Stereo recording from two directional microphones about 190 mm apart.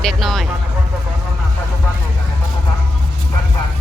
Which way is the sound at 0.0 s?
Centre (ahead or behind).